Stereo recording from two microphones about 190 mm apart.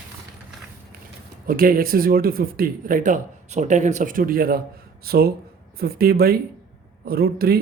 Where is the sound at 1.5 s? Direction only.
50° right (ahead or behind).